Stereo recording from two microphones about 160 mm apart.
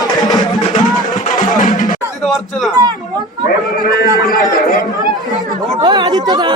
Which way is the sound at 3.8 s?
65° left (ahead or behind).